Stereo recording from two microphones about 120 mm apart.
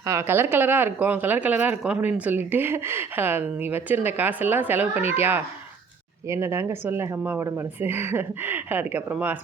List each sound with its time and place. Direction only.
0.0 s speech: 25° right (ahead or behind)